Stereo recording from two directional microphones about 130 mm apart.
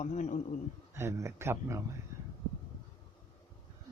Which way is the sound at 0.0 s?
65° left (ahead or behind).